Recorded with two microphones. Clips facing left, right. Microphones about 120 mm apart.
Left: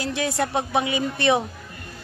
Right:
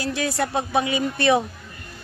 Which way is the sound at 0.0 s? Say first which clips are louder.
Even; 20° left (ahead or behind).